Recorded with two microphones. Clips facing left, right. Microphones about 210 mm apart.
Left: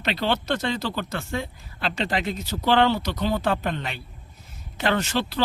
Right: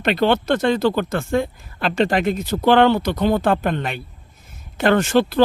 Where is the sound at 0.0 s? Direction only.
55° right (ahead or behind).